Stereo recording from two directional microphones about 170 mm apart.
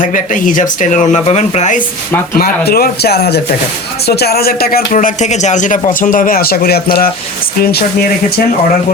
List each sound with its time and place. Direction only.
0.0 s speech: 50° left (ahead or behind)
2.4 s speech: 60° left (ahead or behind)